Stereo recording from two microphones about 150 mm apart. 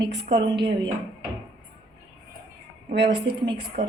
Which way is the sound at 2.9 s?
90° right.